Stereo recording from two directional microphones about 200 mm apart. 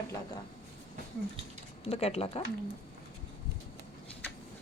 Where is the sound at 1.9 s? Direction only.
30° left (ahead or behind).